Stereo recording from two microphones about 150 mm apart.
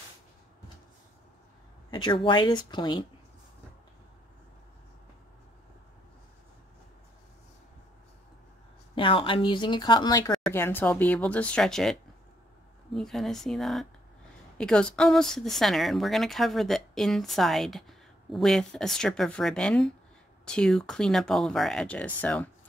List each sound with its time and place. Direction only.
1.9 s speech: 30° left (ahead or behind)
8.9 s speech: 35° left (ahead or behind)
10.5 s speech: 15° left (ahead or behind)